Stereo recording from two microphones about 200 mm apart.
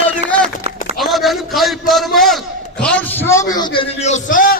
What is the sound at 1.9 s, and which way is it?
A man's voice, centre (ahead or behind).